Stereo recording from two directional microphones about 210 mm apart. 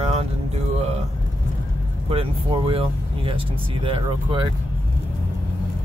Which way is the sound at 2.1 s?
25° right (ahead or behind).